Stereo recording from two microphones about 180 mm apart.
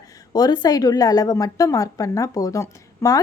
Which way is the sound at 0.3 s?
20° left (ahead or behind).